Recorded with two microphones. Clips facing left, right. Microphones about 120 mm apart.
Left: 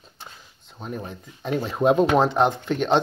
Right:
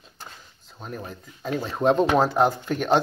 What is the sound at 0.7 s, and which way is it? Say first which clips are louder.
Speech: left 3 dB; centre (ahead or behind).